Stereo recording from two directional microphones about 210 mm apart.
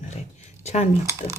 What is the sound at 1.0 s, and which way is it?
Speech, 15° right (ahead or behind).